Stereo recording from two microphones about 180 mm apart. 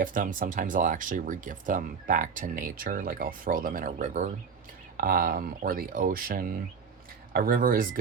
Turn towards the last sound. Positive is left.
turn(degrees=-50)  # may be behind; listen again after turning